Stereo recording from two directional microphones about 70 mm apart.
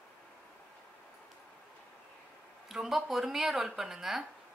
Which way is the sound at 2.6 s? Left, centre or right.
Centre.